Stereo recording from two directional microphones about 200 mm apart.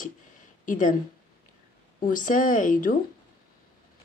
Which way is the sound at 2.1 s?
40° left (ahead or behind).